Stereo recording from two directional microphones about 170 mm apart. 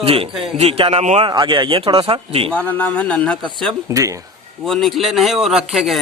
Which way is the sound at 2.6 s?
10° left (ahead or behind).